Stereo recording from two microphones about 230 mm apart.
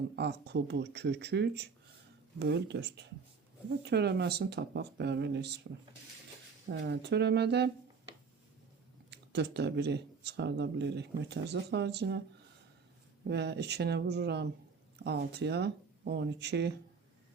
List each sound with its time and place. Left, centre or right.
0.2 s speech: right
6.7 s speech: right
9.0 s speech: right
13.2 s speech: right